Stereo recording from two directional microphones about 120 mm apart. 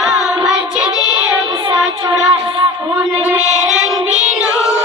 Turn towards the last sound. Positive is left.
turn(degrees=-5)  # may be behind; listen again after turning